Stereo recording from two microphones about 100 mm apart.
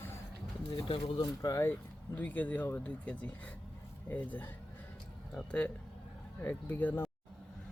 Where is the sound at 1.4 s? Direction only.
35° left (ahead or behind).